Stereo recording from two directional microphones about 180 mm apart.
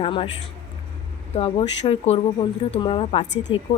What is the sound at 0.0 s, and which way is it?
Speech, 30° left (ahead or behind).